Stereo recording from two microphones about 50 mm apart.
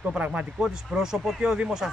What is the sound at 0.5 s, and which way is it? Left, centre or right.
Speech, centre.